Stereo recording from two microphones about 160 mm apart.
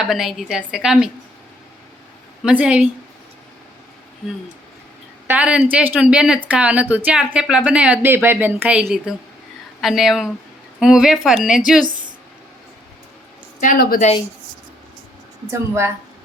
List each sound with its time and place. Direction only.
0.0 s a woman's voice: centre (ahead or behind)
2.4 s speech: 10° right (ahead or behind)
5.3 s a woman's voice: 10° right (ahead or behind)
14.0 s speech: 45° left (ahead or behind)
15.4 s speech: 15° right (ahead or behind)